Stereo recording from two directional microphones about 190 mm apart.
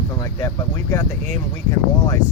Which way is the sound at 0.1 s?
20° left (ahead or behind).